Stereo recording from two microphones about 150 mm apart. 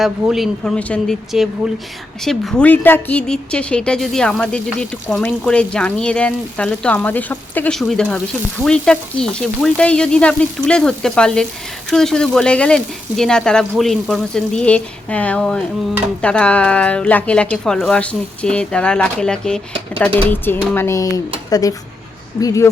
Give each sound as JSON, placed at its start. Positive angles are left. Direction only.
{"t": 0.0, "sound": "a woman's voice", "side_deg": 0}